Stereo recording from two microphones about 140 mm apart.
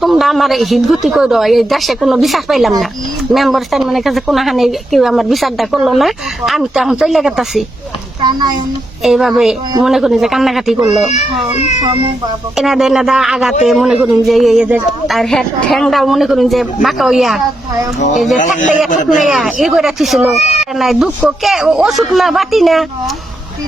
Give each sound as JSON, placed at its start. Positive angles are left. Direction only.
{"t": 0.0, "sound": "speech", "side_deg": 0}
{"t": 8.2, "sound": "a child's voice", "side_deg": -30}
{"t": 9.0, "sound": "speech", "side_deg": -5}
{"t": 12.5, "sound": "speech", "side_deg": 0}
{"t": 18.3, "sound": "a man's voice", "side_deg": 65}
{"t": 19.2, "sound": "speech", "side_deg": 0}
{"t": 20.3, "sound": "speech", "side_deg": 50}
{"t": 20.7, "sound": "speech", "side_deg": 0}